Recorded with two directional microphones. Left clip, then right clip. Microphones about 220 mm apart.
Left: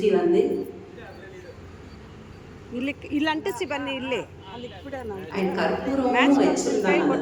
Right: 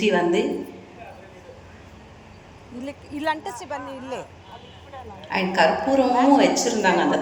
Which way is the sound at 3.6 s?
25° left (ahead or behind).